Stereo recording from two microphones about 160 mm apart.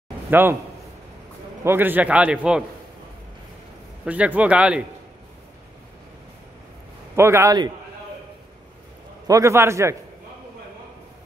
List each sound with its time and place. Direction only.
0.3 s a man's voice: 15° right (ahead or behind)
1.6 s a man's voice: 15° right (ahead or behind)
4.0 s a man's voice: 10° right (ahead or behind)
7.2 s a man's voice: 15° right (ahead or behind)
9.3 s a man's voice: 20° right (ahead or behind)